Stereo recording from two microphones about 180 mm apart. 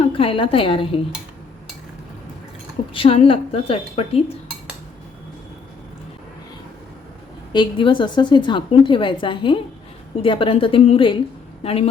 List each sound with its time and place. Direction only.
0.0 s a woman's voice: 30° left (ahead or behind)
2.9 s a woman's voice: 30° left (ahead or behind)
7.5 s a woman's voice: 25° left (ahead or behind)